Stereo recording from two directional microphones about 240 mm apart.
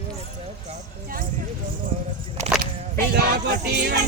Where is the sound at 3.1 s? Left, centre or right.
Right.